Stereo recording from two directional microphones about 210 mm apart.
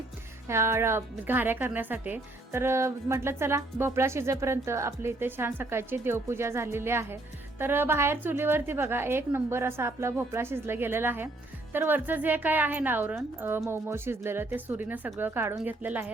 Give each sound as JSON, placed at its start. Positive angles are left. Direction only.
{"t": 0.4, "sound": "speech", "side_deg": -10}